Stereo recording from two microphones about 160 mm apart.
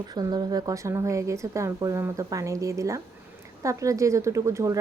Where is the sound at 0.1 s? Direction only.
25° right (ahead or behind).